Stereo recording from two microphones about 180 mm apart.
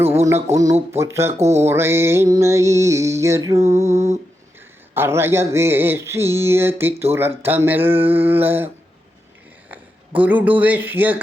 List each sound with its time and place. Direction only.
0.0 s music: 15° right (ahead or behind)
0.4 s speech: 20° right (ahead or behind)
1.3 s a sound: 35° right (ahead or behind)
1.6 s speech: 15° right (ahead or behind)
3.6 s a sound: 40° right (ahead or behind)
4.9 s speech: 15° right (ahead or behind)
10.2 s speech: 10° right (ahead or behind)